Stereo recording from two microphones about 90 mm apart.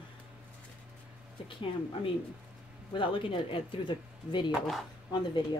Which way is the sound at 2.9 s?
75° left (ahead or behind).